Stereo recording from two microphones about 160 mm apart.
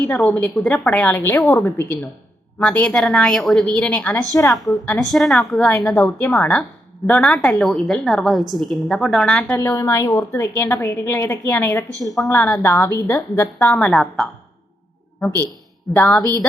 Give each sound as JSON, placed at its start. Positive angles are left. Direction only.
{"t": 0.1, "sound": "a woman's voice", "side_deg": 5}
{"t": 9.6, "sound": "a woman's voice", "side_deg": 20}
{"t": 15.9, "sound": "a woman's voice", "side_deg": 10}